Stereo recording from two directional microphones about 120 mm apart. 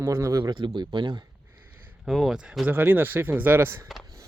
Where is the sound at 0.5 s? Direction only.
40° right (ahead or behind).